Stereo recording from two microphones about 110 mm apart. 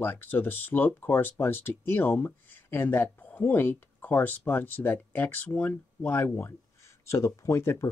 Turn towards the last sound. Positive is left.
turn(degrees=25)  # may be behind; listen again after turning